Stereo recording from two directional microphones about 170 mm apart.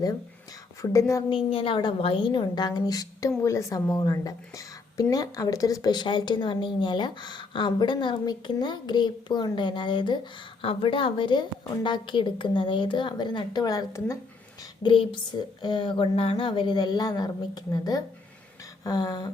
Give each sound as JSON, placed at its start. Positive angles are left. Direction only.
{"t": 0.8, "sound": "a woman's voice", "side_deg": 20}
{"t": 1.3, "sound": "a woman's voice", "side_deg": 30}